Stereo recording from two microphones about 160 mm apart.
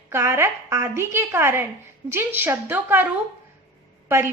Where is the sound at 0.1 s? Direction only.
15° right (ahead or behind).